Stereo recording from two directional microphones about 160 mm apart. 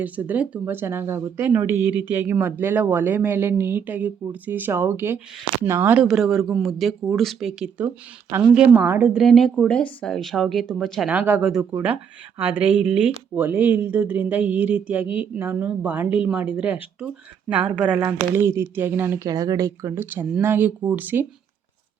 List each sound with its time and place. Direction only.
0.0 s speech: 10° right (ahead or behind)
9.2 s speech: centre (ahead or behind)
11.1 s speech: 10° right (ahead or behind)